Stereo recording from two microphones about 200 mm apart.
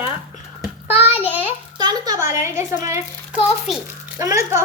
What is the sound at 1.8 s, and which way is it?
A woman's voice, 20° right (ahead or behind).